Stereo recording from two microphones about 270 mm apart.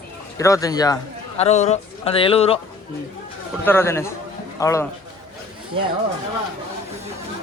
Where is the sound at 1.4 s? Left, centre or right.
Left.